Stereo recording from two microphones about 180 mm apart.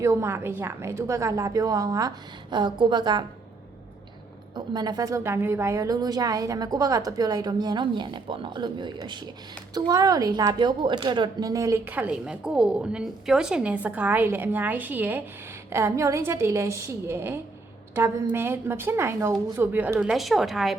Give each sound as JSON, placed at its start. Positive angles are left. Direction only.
{"t": 0.0, "sound": "a woman's voice", "side_deg": -15}
{"t": 4.5, "sound": "a woman's voice", "side_deg": -20}